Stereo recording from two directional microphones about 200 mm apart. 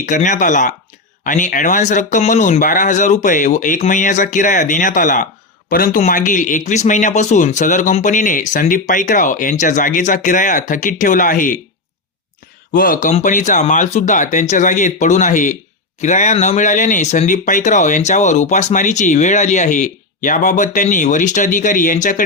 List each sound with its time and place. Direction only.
0.0 s speech: 40° left (ahead or behind)
12.7 s speech: 45° left (ahead or behind)